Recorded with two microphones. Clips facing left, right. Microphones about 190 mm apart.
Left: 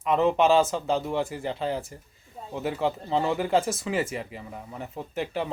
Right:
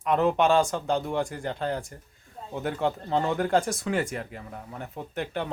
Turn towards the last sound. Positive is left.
turn(degrees=5)  # may be behind; listen again after turning